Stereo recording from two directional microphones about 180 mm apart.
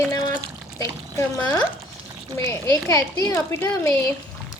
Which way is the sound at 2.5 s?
15° left (ahead or behind).